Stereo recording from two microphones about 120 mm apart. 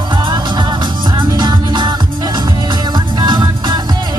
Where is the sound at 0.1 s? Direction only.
40° right (ahead or behind).